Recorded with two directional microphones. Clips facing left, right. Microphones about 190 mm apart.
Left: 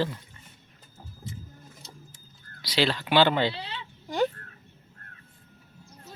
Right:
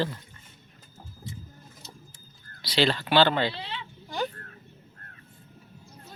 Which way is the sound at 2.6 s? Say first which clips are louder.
Right 1 dB; 10° left (ahead or behind).